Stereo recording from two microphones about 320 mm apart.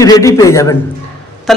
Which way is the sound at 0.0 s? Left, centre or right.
Centre.